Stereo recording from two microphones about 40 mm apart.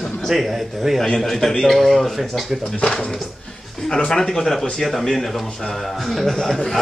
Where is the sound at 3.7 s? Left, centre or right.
Centre.